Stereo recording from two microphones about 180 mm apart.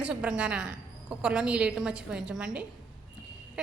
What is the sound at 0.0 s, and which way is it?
A woman's voice, 5° right (ahead or behind).